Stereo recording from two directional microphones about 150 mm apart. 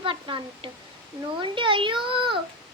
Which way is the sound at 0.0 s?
35° right (ahead or behind).